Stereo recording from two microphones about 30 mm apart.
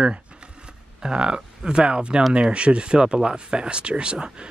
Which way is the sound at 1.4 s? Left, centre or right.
Right.